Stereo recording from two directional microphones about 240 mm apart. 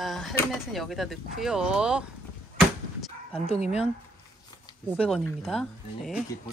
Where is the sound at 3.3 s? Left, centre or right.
Left.